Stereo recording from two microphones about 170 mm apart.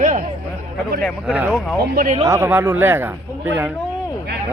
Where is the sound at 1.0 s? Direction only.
5° right (ahead or behind).